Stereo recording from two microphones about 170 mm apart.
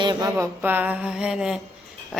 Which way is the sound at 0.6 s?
10° right (ahead or behind).